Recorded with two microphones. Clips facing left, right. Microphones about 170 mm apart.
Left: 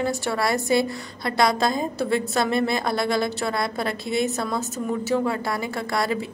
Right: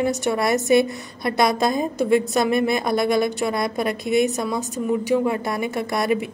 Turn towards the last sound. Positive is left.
turn(degrees=-20)  # may be behind; listen again after turning